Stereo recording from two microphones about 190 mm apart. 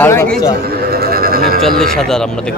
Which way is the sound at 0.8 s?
55° right (ahead or behind).